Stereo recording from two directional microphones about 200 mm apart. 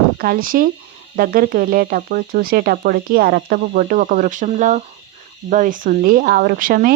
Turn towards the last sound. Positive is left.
turn(degrees=-50)  # may be behind; listen again after turning